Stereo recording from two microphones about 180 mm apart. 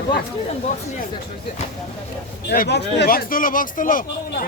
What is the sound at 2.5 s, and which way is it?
Speech, 60° left (ahead or behind).